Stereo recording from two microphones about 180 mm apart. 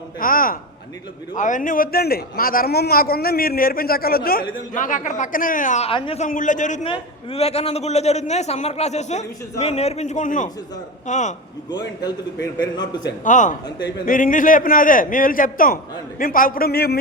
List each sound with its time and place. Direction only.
0.2 s a man's voice: 50° left (ahead or behind)
5.9 s a man's voice: 30° left (ahead or behind)
6.2 s a man's voice: 45° left (ahead or behind)
6.8 s a man's voice: 30° left (ahead or behind)
12.0 s a man's voice: 25° left (ahead or behind)
13.2 s a man's voice: 45° left (ahead or behind)
13.7 s a man's voice: 75° left (ahead or behind)
14.1 s a man's voice: 45° left (ahead or behind)